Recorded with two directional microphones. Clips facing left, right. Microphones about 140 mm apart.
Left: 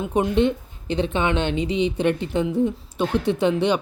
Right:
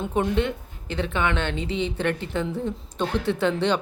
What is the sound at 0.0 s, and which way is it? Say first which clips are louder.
A woman's voice: left 4 dB; 15° left (ahead or behind).